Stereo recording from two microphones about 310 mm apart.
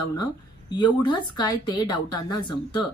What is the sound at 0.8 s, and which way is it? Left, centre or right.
Speech, centre.